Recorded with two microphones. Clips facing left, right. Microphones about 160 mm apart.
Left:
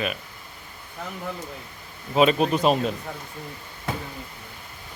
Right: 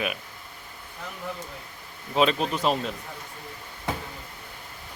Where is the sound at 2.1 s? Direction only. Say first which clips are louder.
Left 4 dB; 5° left (ahead or behind).